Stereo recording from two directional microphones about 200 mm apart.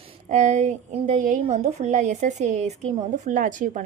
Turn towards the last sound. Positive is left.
turn(degrees=-40)  # may be behind; listen again after turning